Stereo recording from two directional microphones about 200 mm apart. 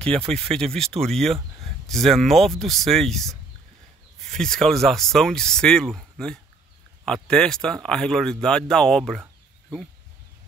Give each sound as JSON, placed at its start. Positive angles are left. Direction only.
{"t": 0.3, "sound": "speech", "side_deg": 5}